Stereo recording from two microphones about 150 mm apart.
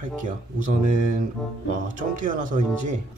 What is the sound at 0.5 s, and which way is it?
Speech, 60° right (ahead or behind).